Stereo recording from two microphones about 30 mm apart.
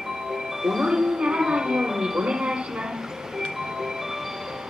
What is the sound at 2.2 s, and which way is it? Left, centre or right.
Speech, right.